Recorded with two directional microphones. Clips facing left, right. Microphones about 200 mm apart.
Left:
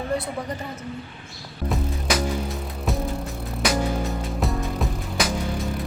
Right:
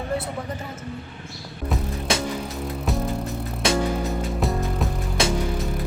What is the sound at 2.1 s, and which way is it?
Music, 25° right (ahead or behind).